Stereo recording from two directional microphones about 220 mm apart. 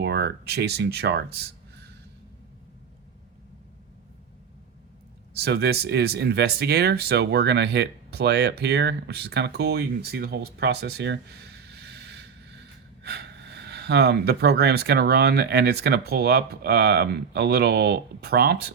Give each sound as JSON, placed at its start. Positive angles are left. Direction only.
{"t": 0.0, "sound": "speech", "side_deg": -50}
{"t": 5.3, "sound": "speech", "side_deg": -50}